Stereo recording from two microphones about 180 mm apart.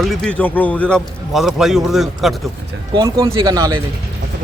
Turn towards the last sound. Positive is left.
turn(degrees=-20)  # may be behind; listen again after turning